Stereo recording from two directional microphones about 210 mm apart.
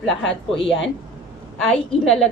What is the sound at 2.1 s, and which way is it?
Speech, centre (ahead or behind).